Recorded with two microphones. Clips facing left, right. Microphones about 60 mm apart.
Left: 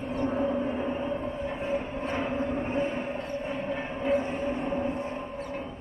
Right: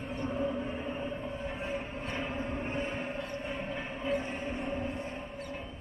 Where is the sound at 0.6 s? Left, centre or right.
Centre.